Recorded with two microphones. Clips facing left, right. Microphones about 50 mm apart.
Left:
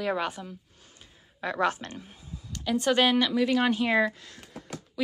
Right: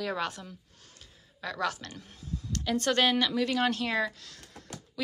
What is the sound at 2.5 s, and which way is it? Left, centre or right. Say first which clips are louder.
Speech: left 3 dB; centre.